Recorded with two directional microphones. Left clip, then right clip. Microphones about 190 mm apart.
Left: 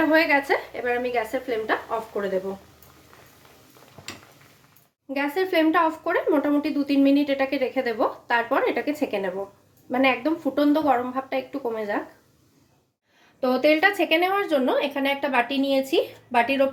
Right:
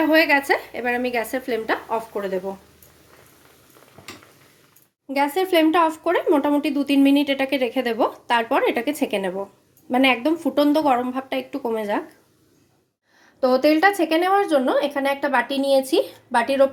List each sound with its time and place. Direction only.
0.1 s a woman's voice: 40° right (ahead or behind)
5.1 s speech: 35° right (ahead or behind)
13.4 s speech: 25° right (ahead or behind)